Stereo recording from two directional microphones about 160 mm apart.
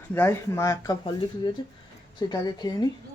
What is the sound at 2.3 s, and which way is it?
Speech, 25° left (ahead or behind).